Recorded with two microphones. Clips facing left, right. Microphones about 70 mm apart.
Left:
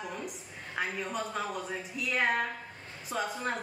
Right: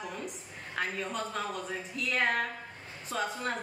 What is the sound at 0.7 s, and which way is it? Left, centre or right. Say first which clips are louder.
A woman's voice: even; centre.